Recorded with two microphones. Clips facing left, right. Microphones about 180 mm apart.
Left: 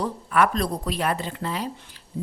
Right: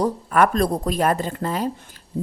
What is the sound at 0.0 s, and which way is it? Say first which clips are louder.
A woman's voice: right 4 dB; 45° right (ahead or behind).